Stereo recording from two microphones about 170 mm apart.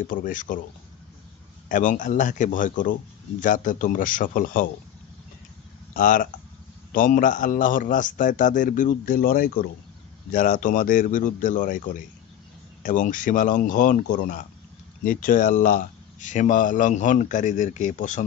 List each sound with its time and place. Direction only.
0.0 s speech: 50° left (ahead or behind)
1.7 s speech: 50° left (ahead or behind)
5.9 s speech: 50° left (ahead or behind)